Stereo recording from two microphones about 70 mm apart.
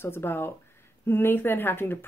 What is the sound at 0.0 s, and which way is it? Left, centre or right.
A woman's voice, left.